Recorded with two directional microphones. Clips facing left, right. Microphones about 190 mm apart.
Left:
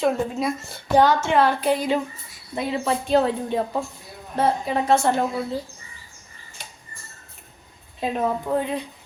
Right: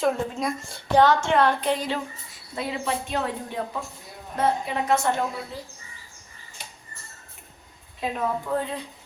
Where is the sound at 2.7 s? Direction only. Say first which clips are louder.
Left 9 dB; 35° left (ahead or behind).